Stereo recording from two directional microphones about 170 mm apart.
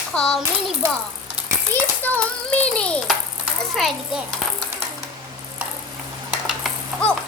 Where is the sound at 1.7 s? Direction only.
10° left (ahead or behind).